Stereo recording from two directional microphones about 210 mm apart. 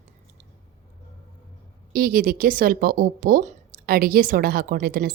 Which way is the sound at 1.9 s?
45° right (ahead or behind).